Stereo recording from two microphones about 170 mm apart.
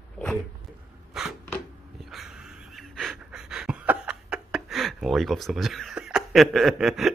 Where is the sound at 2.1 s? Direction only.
Centre (ahead or behind).